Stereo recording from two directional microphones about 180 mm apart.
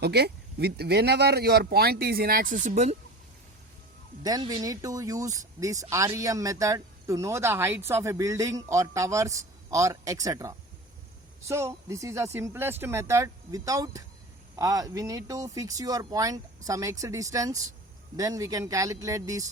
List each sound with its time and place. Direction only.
0.0 s speech: 65° right (ahead or behind); by 3.0 s 40° right (ahead or behind)
4.2 s speech: 20° right (ahead or behind)